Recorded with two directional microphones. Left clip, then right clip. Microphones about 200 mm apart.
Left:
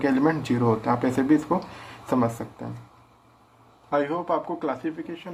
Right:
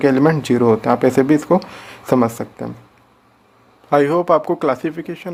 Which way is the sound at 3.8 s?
50° right (ahead or behind).